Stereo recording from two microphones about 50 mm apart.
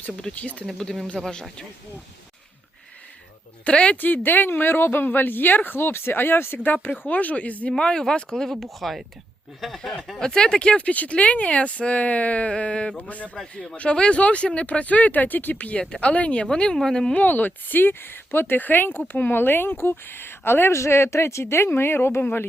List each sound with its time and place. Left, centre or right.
0.3 s speech: centre
3.6 s speech: left
4.0 s speech: left
7.1 s speech: left
7.8 s speech: centre
8.4 s speech: centre; by 13.3 s left
13.3 s speech: centre
13.7 s speech: left
15.8 s speech: left
17.2 s speech: left